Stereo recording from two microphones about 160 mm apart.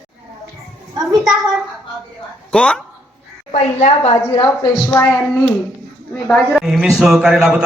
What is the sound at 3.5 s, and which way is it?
Speech, 45° left (ahead or behind).